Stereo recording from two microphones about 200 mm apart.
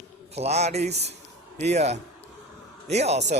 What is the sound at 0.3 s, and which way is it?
Speech, 30° right (ahead or behind).